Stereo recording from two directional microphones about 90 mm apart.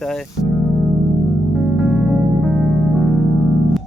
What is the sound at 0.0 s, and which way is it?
Speech, 5° left (ahead or behind).